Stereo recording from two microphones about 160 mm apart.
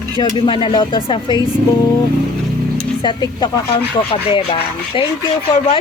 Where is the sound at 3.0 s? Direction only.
30° left (ahead or behind).